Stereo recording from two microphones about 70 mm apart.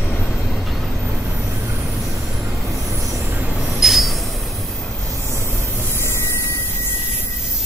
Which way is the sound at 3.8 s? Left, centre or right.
Centre.